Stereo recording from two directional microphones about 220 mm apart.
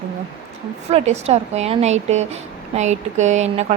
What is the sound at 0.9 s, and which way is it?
A woman's voice, 30° right (ahead or behind).